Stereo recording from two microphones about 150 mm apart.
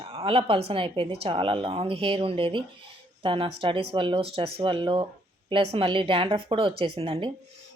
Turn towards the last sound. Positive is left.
turn(degrees=-40)  # may be behind; listen again after turning